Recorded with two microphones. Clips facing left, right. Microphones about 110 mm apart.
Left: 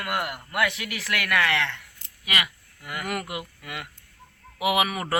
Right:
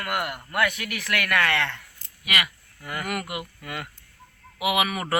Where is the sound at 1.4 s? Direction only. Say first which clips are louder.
Left 1 dB; 5° left (ahead or behind).